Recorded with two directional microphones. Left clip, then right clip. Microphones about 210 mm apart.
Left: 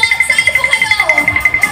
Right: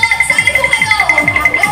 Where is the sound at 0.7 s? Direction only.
45° left (ahead or behind).